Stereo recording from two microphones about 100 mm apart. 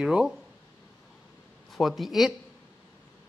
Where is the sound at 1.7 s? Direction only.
Centre (ahead or behind).